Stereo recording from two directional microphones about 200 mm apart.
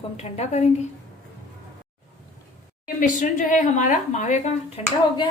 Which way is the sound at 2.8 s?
40° left (ahead or behind).